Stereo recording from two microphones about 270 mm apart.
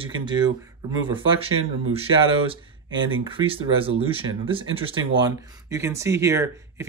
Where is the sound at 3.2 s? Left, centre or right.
Centre.